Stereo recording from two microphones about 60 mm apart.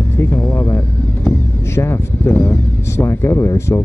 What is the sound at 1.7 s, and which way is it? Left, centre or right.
Speech, left.